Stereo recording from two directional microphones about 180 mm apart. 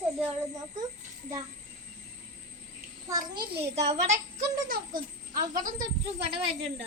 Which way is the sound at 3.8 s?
40° right (ahead or behind).